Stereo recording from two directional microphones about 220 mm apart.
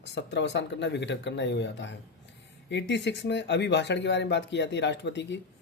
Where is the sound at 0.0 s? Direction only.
50° left (ahead or behind).